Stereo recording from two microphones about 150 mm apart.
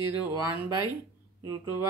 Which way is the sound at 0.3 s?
15° right (ahead or behind).